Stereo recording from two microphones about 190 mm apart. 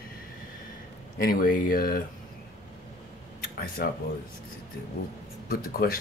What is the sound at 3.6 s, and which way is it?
Speech, 50° left (ahead or behind).